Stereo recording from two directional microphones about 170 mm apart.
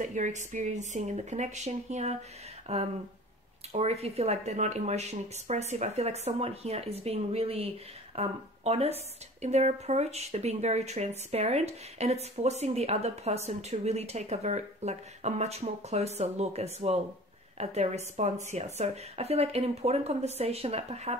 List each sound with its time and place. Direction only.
0.0 s a woman's voice: 45° right (ahead or behind)